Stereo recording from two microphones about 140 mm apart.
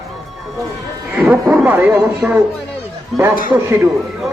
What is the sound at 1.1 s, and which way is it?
Speech, 5° right (ahead or behind).